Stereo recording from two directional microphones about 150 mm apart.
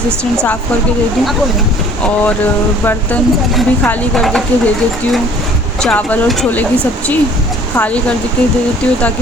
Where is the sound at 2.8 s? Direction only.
15° left (ahead or behind).